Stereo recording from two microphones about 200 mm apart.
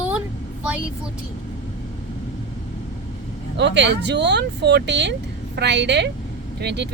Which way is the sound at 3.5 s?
60° right (ahead or behind).